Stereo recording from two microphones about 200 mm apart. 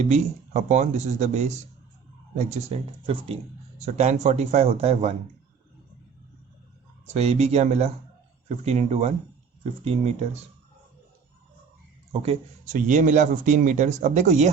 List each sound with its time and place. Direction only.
0.0 s speech: 35° right (ahead or behind)
7.1 s speech: 35° right (ahead or behind)
12.2 s speech: 35° right (ahead or behind)